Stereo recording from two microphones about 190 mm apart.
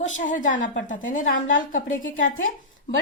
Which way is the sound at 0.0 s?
45° left (ahead or behind).